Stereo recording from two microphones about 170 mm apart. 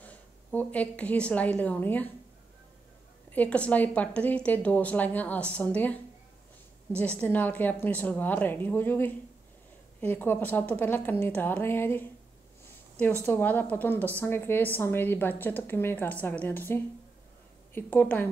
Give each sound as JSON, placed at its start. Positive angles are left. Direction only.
{"t": 0.0, "sound": "a woman's voice", "side_deg": 10}
{"t": 3.3, "sound": "a woman's voice", "side_deg": 10}
{"t": 7.0, "sound": "a woman's voice", "side_deg": 10}
{"t": 13.2, "sound": "a woman's voice", "side_deg": 10}